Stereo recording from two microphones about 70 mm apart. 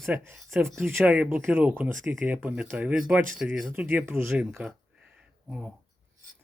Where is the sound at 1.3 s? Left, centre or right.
Right.